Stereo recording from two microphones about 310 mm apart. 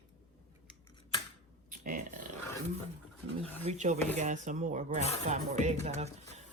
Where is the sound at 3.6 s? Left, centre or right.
Right.